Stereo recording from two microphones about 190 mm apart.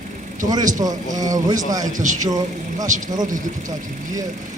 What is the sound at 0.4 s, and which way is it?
Speech, 20° right (ahead or behind).